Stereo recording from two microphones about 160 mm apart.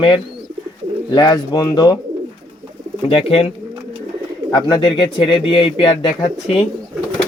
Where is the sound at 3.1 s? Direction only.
35° left (ahead or behind).